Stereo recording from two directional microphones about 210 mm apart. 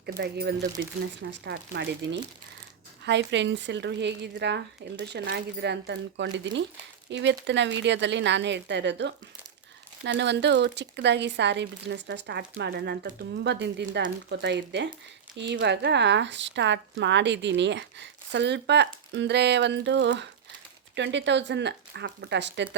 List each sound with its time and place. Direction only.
0.2 s speech: 50° right (ahead or behind)